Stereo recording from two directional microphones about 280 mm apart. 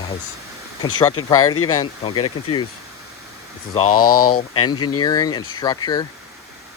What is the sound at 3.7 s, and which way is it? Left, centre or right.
Speech, centre.